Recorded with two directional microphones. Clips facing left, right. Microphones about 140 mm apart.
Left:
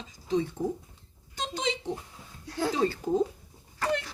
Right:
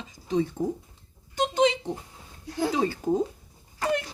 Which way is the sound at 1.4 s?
55° right (ahead or behind).